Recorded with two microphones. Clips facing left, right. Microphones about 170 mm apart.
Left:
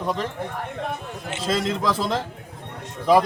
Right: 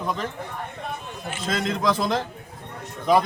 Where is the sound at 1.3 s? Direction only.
30° left (ahead or behind).